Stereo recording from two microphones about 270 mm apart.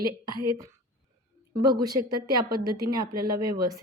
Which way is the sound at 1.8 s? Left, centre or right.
Centre.